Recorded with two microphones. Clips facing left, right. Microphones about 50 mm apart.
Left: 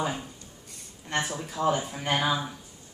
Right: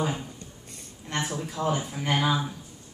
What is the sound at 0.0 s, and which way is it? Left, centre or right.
A woman's voice, centre.